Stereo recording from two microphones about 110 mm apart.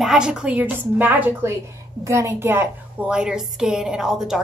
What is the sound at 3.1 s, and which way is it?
A woman's voice, 10° right (ahead or behind).